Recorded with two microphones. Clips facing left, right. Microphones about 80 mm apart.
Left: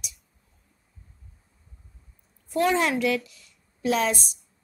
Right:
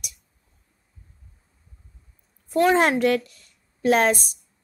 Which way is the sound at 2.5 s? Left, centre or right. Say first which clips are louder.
Right 4 dB; right.